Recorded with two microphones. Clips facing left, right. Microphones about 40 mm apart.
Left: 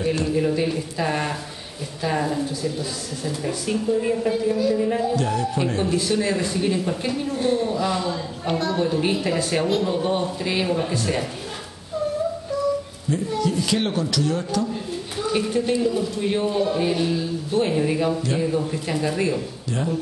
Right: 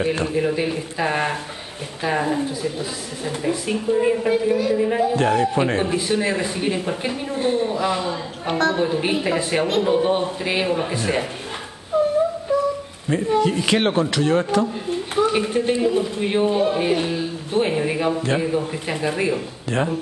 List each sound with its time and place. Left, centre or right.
0.0 s a man's voice: right
0.3 s a man's voice: centre
5.1 s a man's voice: right
11.9 s a sound: right
13.1 s a man's voice: right
15.1 s a man's voice: right